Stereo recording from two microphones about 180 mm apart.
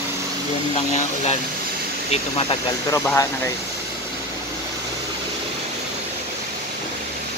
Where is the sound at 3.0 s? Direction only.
15° left (ahead or behind).